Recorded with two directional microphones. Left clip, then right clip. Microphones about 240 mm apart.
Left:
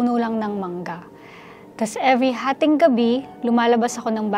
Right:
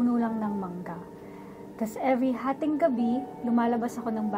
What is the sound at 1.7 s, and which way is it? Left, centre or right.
Speech, left.